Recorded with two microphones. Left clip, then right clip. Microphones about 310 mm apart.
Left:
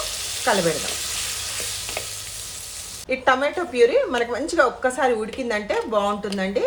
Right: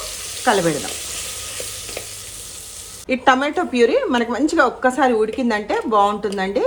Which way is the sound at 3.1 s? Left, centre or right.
Centre.